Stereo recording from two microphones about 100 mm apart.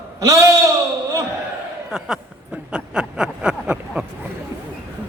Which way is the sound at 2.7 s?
10° right (ahead or behind).